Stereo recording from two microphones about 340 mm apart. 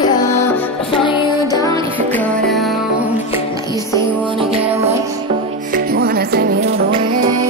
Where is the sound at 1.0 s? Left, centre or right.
Centre.